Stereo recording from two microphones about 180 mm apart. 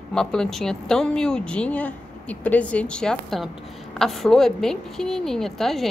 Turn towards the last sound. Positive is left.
turn(degrees=0)  # may be behind; listen again after turning